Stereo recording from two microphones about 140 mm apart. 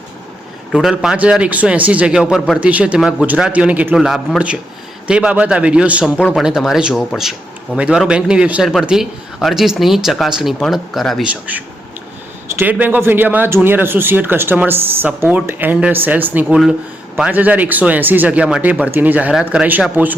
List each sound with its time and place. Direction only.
0.7 s speech: 5° right (ahead or behind)
11.3 s speech: 10° right (ahead or behind)